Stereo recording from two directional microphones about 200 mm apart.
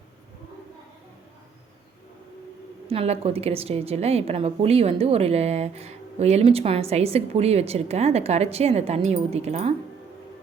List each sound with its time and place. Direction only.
2.8 s a woman's voice: 30° right (ahead or behind)